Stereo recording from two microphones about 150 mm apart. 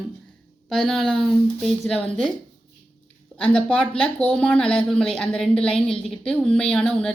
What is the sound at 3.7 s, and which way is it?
A woman's voice, 5° left (ahead or behind).